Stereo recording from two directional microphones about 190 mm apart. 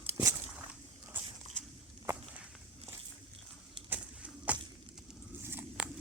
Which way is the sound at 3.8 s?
10° right (ahead or behind).